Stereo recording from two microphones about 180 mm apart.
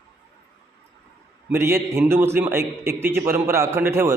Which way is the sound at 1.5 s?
15° right (ahead or behind).